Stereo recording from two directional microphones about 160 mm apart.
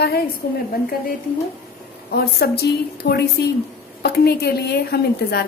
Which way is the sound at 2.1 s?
85° left.